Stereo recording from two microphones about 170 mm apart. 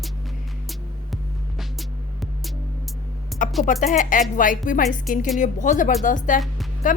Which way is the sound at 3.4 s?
50° left (ahead or behind).